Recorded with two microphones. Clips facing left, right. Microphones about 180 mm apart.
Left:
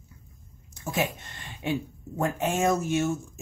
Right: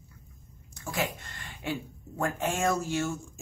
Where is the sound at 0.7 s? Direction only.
25° left (ahead or behind).